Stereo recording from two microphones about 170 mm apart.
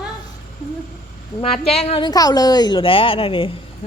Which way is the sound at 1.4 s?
35° left (ahead or behind).